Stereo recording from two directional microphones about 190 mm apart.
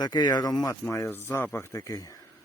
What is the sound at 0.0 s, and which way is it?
Speech, 20° left (ahead or behind).